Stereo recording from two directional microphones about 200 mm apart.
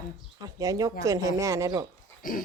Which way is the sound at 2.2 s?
45° left (ahead or behind).